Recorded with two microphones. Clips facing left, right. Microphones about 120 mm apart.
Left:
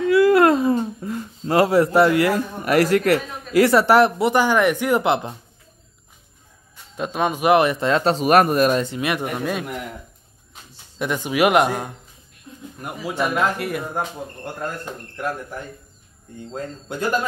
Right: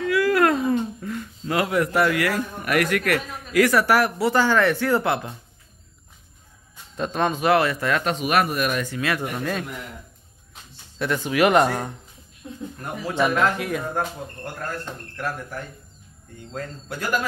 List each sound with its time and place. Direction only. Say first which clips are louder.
0.0 s speech: left 5 dB; 25° left (ahead or behind)
7.0 s speech: left 1 dB; 10° left (ahead or behind)
11.0 s speech: left 1 dB; 15° left (ahead or behind)